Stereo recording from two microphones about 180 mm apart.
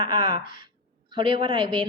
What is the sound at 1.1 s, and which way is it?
Speech, 25° right (ahead or behind).